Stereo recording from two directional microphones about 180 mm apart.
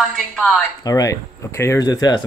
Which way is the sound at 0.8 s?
20° left (ahead or behind).